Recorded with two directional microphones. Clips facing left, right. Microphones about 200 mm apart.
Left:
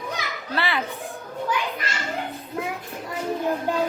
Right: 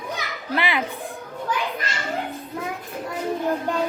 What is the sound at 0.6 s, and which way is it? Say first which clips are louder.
Speech: right 1 dB; 15° right (ahead or behind).